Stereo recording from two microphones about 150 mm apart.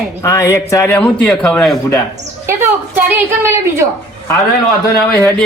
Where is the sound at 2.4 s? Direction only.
15° right (ahead or behind).